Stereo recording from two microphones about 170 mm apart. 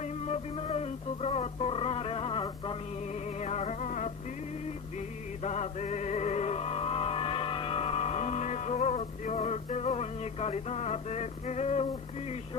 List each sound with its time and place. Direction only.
0.0 s music: 40° left (ahead or behind)
3.2 s music: 40° left (ahead or behind)